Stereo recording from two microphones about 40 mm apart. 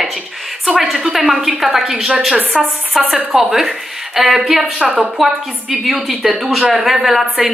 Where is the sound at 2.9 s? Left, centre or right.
Centre.